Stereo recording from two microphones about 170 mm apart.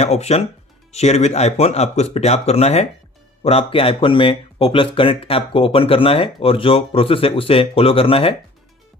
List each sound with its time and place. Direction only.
0.0 s speech: 40° left (ahead or behind)